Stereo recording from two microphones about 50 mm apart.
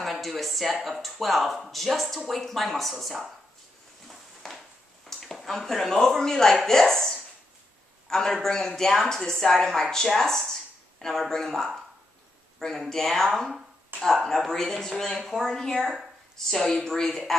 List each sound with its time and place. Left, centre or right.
0.0 s speech: centre
4.1 s a sound: centre
5.3 s a woman's voice: centre